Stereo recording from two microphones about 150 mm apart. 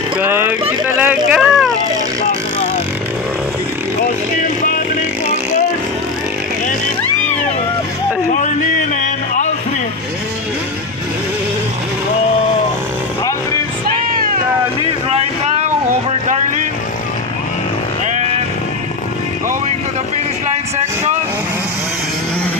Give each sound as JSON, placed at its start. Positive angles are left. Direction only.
{"t": 0.2, "sound": "speech", "side_deg": -15}
{"t": 8.3, "sound": "a sound", "side_deg": 55}
{"t": 15.5, "sound": "vehicle", "side_deg": -50}
{"t": 18.1, "sound": "sheep", "side_deg": -50}